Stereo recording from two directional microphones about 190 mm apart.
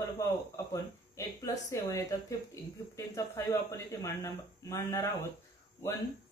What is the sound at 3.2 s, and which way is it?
Speech, 15° left (ahead or behind).